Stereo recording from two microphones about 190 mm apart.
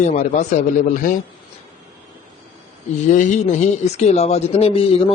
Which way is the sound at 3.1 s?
40° left (ahead or behind).